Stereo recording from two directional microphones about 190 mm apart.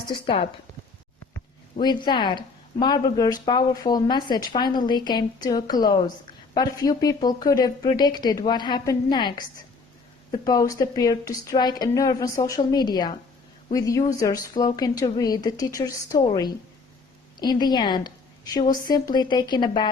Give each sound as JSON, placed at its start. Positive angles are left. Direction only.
{"t": 0.1, "sound": "speech", "side_deg": 30}
{"t": 1.8, "sound": "speech", "side_deg": 25}